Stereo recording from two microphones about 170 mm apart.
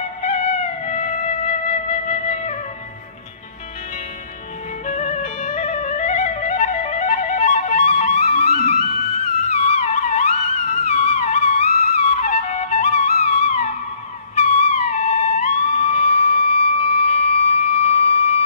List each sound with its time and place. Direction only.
0.2 s music: 40° left (ahead or behind)
4.8 s music: 45° left (ahead or behind)